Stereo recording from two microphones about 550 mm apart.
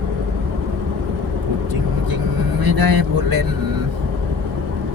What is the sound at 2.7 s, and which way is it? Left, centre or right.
Speech, right.